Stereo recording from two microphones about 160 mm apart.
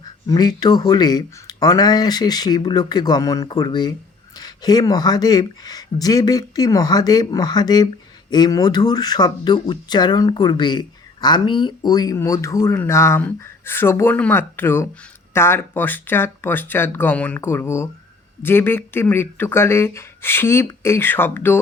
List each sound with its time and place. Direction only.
0.0 s speech: 25° left (ahead or behind)